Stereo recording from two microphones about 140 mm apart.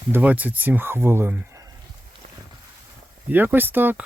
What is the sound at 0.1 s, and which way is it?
Speech, 10° right (ahead or behind).